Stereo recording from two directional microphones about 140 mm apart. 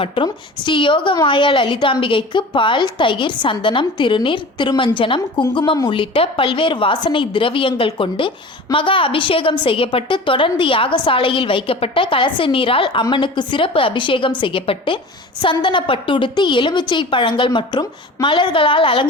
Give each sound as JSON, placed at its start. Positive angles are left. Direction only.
{"t": 0.0, "sound": "a woman's voice", "side_deg": 35}